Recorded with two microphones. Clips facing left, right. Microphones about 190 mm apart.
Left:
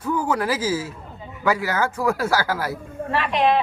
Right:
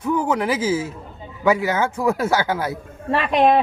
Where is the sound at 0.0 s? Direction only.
20° right (ahead or behind).